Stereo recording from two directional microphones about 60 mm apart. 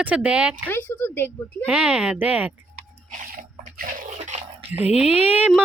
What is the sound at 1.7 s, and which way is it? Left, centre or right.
Speech, centre.